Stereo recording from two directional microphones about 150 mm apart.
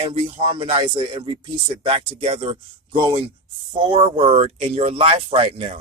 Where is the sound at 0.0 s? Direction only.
40° right (ahead or behind).